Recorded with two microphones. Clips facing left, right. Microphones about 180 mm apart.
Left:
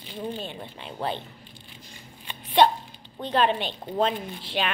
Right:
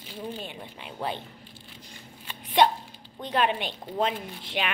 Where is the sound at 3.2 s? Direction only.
30° left (ahead or behind).